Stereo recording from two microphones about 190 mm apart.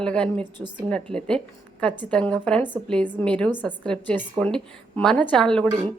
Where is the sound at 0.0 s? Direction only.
5° left (ahead or behind).